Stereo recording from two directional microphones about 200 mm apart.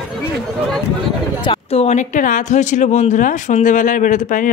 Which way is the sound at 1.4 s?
30° left (ahead or behind).